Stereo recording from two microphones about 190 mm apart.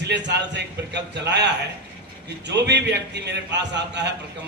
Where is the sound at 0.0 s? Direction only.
65° right (ahead or behind).